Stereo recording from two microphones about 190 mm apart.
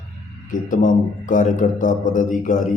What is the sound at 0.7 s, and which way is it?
Speech, 45° left (ahead or behind).